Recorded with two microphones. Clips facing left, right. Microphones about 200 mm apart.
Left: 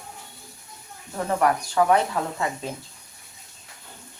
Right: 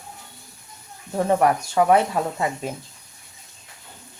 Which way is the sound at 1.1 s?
25° right (ahead or behind).